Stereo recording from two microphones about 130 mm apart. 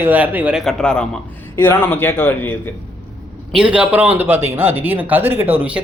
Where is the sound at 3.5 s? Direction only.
10° right (ahead or behind).